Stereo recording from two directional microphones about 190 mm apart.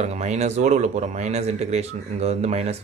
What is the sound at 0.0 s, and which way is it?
Speech, 35° right (ahead or behind).